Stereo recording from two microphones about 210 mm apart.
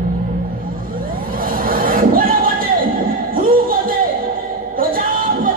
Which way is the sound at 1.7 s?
40° right (ahead or behind).